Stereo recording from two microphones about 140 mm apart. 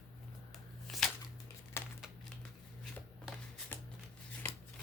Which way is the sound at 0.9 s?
Centre (ahead or behind).